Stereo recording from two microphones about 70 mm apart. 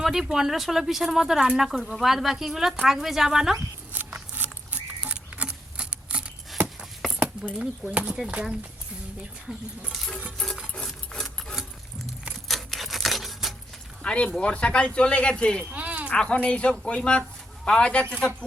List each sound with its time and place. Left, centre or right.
0.0 s speech: centre
4.3 s patter: right
7.6 s speech: centre
9.5 s speech: centre
10.3 s a sound: centre
10.8 s rub: centre
12.5 s a sound: centre
14.0 s speech: centre
15.7 s a sound: centre
16.0 s speech: centre